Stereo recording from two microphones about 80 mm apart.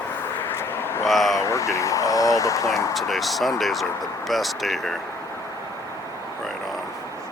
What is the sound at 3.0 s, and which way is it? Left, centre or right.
Speech, centre.